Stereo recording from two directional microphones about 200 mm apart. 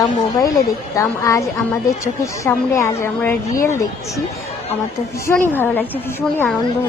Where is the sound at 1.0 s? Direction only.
15° left (ahead or behind).